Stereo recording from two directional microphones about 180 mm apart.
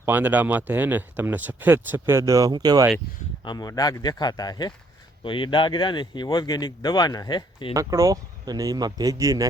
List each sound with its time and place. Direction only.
0.0 s speech: 10° right (ahead or behind)
3.4 s speech: 25° left (ahead or behind)
7.7 s speech: 20° right (ahead or behind)